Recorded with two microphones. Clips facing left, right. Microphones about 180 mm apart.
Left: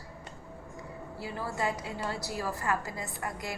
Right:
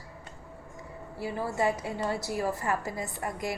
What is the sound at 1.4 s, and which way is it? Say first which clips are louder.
A woman's voice: right 4 dB; 25° right (ahead or behind).